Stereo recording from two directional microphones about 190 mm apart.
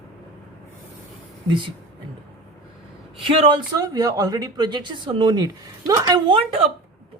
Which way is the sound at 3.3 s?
25° right (ahead or behind).